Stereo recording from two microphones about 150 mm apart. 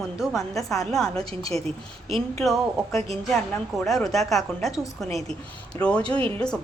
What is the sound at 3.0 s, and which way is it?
A woman's voice, centre (ahead or behind).